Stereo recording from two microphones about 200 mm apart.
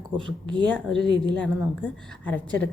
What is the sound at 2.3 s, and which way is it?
Speech, 5° left (ahead or behind).